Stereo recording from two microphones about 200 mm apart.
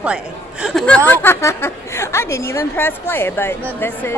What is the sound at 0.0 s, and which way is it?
Speech, 5° right (ahead or behind).